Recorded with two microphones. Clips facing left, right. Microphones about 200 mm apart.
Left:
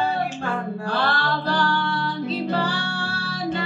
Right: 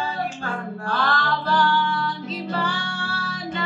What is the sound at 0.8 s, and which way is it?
Music, 35° left (ahead or behind).